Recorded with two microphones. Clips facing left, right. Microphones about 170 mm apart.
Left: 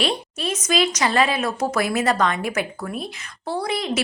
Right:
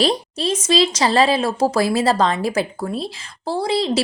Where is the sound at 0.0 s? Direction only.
35° right (ahead or behind).